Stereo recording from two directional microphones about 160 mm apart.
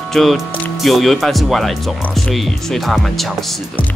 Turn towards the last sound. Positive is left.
turn(degrees=0)  # may be behind; listen again after turning